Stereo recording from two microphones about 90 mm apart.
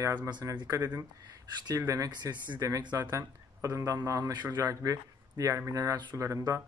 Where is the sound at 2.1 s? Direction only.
55° right (ahead or behind).